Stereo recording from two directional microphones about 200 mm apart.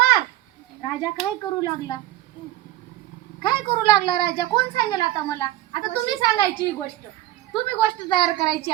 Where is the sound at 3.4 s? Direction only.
20° left (ahead or behind).